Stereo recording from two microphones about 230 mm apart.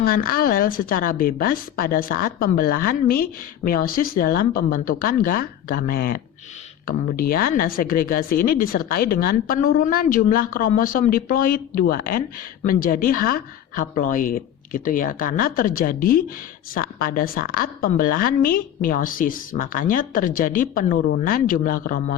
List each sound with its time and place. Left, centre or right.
0.1 s a woman's voice: left